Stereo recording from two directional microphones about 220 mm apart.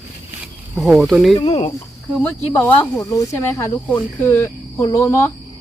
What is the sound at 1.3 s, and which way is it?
Speech, 25° left (ahead or behind).